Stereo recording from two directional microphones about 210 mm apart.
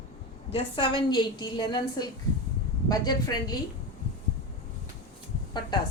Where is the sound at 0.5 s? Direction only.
25° left (ahead or behind).